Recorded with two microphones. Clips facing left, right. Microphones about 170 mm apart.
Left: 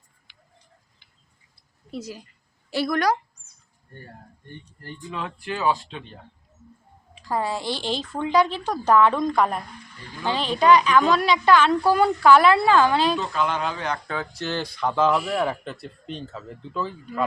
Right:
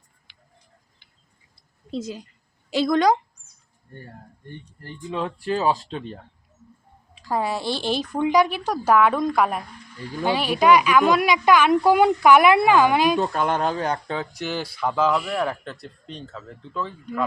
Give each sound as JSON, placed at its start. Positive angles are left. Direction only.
{"t": 1.9, "sound": "a woman's voice", "side_deg": -20}
{"t": 5.1, "sound": "speech", "side_deg": -30}
{"t": 7.3, "sound": "a woman's voice", "side_deg": -15}
{"t": 7.6, "sound": "speech", "side_deg": 15}
{"t": 7.9, "sound": "a woman's voice", "side_deg": -15}
{"t": 13.1, "sound": "speech", "side_deg": -50}
{"t": 13.9, "sound": "speech", "side_deg": -20}